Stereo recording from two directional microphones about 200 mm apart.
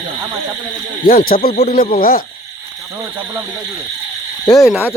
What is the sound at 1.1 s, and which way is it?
Snake, 45° left (ahead or behind).